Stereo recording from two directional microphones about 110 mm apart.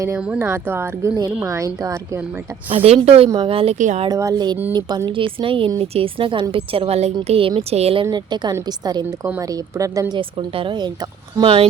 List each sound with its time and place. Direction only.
0.3 s speech: 20° right (ahead or behind)
2.8 s a woman's voice: 65° right (ahead or behind)
4.1 s speech: 30° right (ahead or behind)
5.0 s a woman's voice: 50° right (ahead or behind); by 8.0 s 70° right (ahead or behind)
8.1 s speech: 40° right (ahead or behind)
10.2 s a woman's voice: 55° right (ahead or behind)